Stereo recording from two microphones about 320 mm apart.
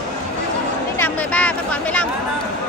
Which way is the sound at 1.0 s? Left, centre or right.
Centre.